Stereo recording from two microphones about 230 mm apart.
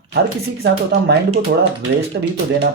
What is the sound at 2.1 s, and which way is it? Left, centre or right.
Speech, right.